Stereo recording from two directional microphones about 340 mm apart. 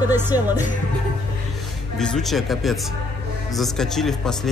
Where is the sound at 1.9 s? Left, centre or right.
Centre.